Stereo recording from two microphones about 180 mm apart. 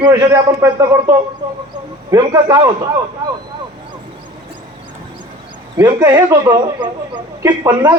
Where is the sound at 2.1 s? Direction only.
20° right (ahead or behind).